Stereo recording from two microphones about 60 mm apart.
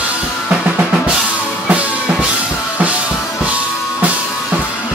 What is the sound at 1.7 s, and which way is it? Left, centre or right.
Music, right.